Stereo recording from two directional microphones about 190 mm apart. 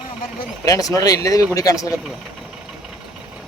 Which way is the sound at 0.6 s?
20° left (ahead or behind).